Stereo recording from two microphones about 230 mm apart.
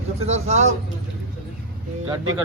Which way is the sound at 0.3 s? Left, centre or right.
Right.